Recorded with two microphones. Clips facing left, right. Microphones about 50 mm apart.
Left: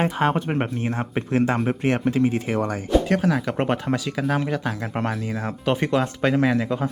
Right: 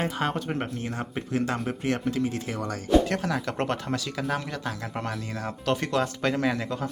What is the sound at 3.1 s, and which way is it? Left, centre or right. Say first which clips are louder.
Speech: left 6 dB; centre.